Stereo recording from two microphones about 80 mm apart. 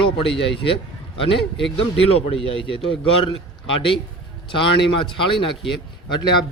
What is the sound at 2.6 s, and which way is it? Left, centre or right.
Speech, left.